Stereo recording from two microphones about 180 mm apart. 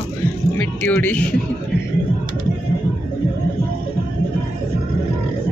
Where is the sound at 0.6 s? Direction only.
10° left (ahead or behind).